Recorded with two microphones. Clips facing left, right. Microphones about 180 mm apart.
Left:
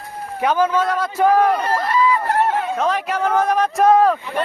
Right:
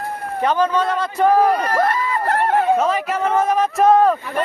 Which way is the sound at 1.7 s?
55° right (ahead or behind).